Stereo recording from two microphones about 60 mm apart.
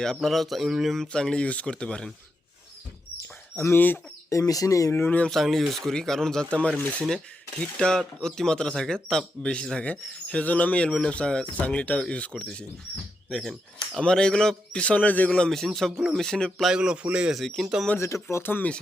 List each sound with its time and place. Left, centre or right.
0.0 s speech: centre
1.0 s speech: centre
3.2 s a sound: left
4.3 s speech: left
5.0 s speech: left
5.3 s speech: centre
13.3 s speech: centre
14.0 s speech: centre
15.3 s speech: centre
16.7 s a man's voice: centre
17.6 s speech: centre
17.9 s speech: left